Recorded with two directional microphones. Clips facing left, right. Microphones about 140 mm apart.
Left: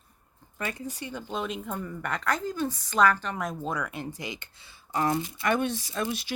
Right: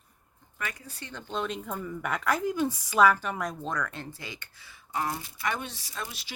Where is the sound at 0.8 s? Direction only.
10° left (ahead or behind).